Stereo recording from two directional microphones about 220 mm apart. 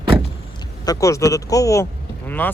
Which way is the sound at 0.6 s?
15° left (ahead or behind).